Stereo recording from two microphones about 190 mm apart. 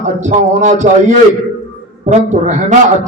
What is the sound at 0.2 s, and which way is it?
Speech, 40° right (ahead or behind).